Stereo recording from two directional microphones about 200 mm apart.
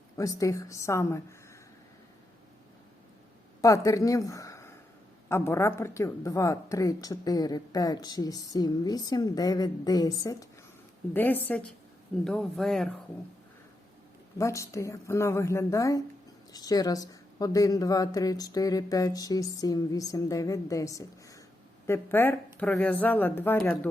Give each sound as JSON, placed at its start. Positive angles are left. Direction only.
{"t": 0.2, "sound": "a woman's voice", "side_deg": 15}
{"t": 3.6, "sound": "a woman's voice", "side_deg": 15}
{"t": 14.3, "sound": "a woman's voice", "side_deg": 15}